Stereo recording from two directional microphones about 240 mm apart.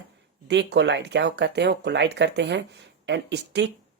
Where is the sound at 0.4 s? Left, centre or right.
Right.